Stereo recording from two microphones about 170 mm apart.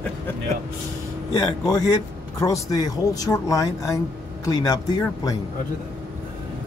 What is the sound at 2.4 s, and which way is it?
Speech, 20° left (ahead or behind).